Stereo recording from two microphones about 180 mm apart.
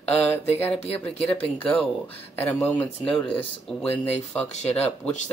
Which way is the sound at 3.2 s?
30° left (ahead or behind).